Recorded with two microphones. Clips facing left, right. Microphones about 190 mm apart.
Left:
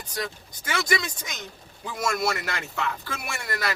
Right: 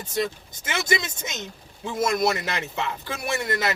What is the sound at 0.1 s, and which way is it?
Speech, 25° right (ahead or behind).